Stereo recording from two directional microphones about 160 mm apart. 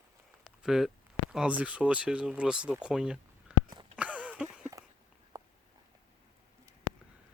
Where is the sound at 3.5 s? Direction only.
10° right (ahead or behind).